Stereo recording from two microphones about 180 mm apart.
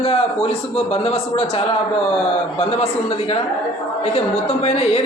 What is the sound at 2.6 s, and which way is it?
Speech, 35° left (ahead or behind).